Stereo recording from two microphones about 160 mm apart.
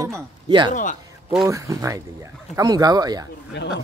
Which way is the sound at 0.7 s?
55° left (ahead or behind).